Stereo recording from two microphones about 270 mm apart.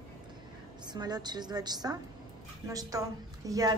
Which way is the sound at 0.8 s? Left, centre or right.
Centre.